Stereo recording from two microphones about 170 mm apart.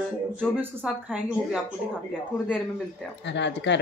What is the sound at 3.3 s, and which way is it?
Speech, 90° left.